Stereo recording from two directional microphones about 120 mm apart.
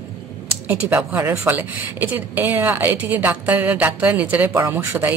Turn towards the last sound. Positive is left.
turn(degrees=-20)  # may be behind; listen again after turning